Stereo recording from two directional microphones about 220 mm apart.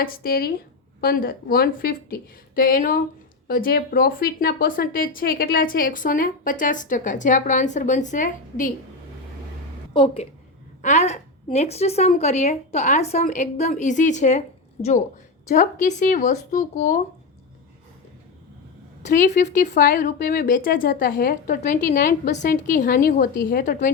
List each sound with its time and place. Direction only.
0.0 s speech: 40° left (ahead or behind)
9.9 s a woman's voice: 20° left (ahead or behind)
19.0 s speech: 35° left (ahead or behind)